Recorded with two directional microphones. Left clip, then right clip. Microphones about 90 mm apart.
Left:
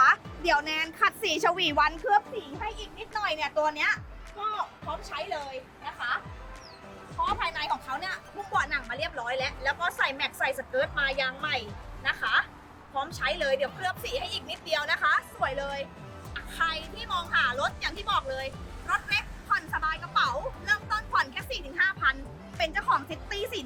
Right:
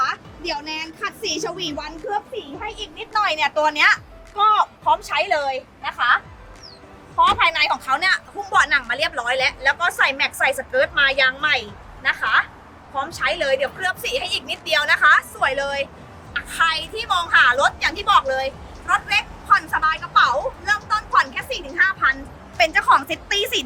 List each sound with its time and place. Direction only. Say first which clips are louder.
0.0 s a woman's voice: left 1 dB; 35° left (ahead or behind); by 2.2 s 20° left (ahead or behind)
3.1 s a woman's voice: right 11 dB; 5° right (ahead or behind)
5.0 s a woman's voice: right 14 dB; 35° right (ahead or behind)
7.3 s a woman's voice: right 11 dB; 20° right (ahead or behind)